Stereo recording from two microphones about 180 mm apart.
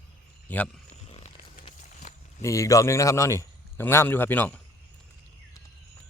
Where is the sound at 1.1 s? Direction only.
35° left (ahead or behind).